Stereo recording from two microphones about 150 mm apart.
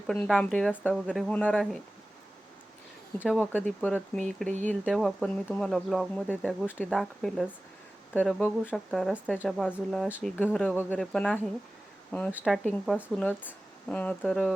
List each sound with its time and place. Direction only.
0.1 s speech: 5° left (ahead or behind)
3.2 s speech: 5° left (ahead or behind)
6.5 s speech: centre (ahead or behind)
8.7 s speech: centre (ahead or behind)